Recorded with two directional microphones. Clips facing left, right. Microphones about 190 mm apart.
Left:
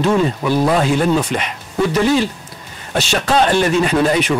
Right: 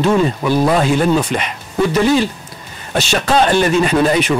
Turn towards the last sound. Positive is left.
turn(degrees=-15)  # may be behind; listen again after turning